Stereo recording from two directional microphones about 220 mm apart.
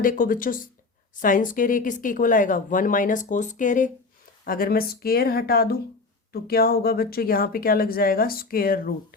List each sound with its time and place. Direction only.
0.0 s speech: 40° left (ahead or behind)